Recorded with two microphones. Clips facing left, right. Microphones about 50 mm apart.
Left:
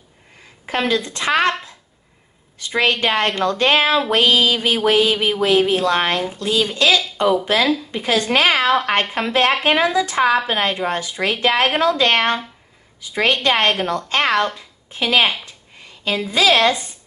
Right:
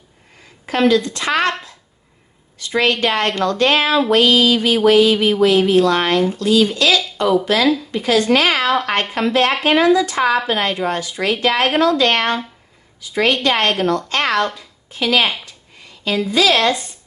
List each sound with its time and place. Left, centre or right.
0.7 s a woman's voice: left
2.6 s a woman's voice: left
6.1 s a woman's voice: centre
6.4 s a woman's voice: left
15.4 s a sound: left
16.3 s a woman's voice: left